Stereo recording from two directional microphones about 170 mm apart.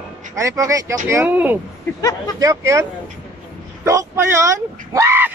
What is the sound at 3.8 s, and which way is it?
Speech, 20° right (ahead or behind).